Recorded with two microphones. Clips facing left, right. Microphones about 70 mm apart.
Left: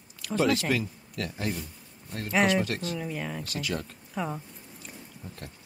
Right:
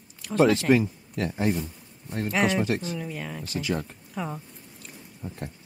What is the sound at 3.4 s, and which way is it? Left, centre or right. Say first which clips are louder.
Speech: right 4 dB; right.